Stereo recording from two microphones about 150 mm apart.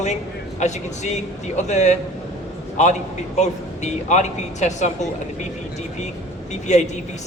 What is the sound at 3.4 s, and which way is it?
Speech, 50° left (ahead or behind).